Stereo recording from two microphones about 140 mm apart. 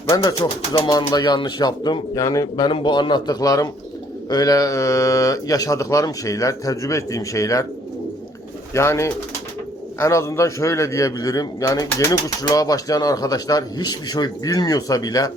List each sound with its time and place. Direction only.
0.1 s a man's voice: 25° left (ahead or behind)
8.7 s a man's voice: 20° left (ahead or behind)